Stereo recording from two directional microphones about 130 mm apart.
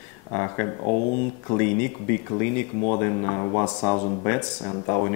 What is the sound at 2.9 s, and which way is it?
Speech, 20° left (ahead or behind).